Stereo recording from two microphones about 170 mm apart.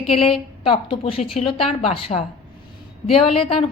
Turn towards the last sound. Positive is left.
turn(degrees=35)  # may be behind; listen again after turning